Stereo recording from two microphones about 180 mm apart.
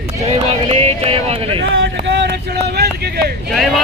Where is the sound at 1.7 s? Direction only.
85° right.